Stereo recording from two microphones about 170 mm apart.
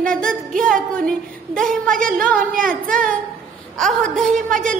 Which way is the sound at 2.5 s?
55° right (ahead or behind).